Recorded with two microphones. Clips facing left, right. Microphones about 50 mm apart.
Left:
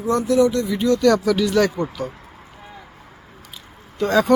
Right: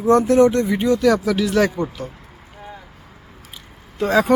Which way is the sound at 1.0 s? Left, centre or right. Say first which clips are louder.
Even; centre.